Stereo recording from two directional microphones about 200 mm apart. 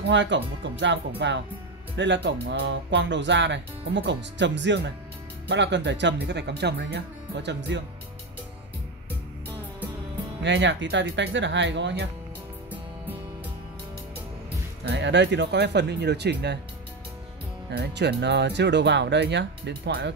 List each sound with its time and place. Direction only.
0.1 s speech: 65° right (ahead or behind)
10.4 s speech: 65° right (ahead or behind)
14.9 s speech: 60° right (ahead or behind)
17.6 s speech: 55° right (ahead or behind)